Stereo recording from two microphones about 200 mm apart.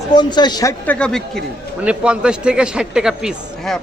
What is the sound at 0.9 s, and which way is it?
A man's voice, 5° left (ahead or behind).